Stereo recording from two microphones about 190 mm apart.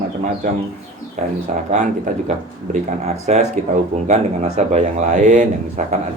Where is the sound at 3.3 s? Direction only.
35° right (ahead or behind).